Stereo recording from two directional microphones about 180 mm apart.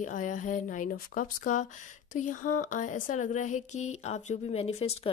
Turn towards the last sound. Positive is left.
turn(degrees=35)  # may be behind; listen again after turning